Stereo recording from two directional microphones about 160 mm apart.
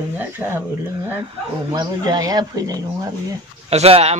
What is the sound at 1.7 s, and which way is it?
Speech, 25° right (ahead or behind).